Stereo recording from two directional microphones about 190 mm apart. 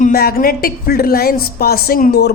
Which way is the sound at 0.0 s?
55° left (ahead or behind).